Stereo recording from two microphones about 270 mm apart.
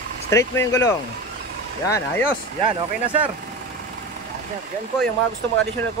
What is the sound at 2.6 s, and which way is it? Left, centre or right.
Speech, centre.